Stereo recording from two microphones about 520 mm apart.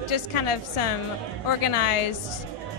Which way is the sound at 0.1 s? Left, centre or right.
Left.